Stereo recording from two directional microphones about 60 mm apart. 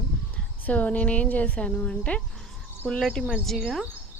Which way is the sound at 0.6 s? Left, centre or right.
Left.